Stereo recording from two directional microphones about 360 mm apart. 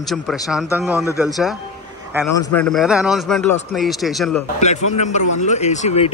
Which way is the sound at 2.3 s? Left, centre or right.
Centre.